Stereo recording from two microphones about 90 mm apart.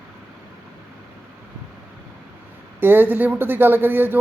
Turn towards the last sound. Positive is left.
turn(degrees=-25)  # may be behind; listen again after turning